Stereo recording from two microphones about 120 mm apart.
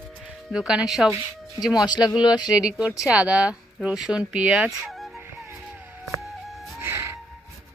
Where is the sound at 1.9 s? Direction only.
35° left (ahead or behind).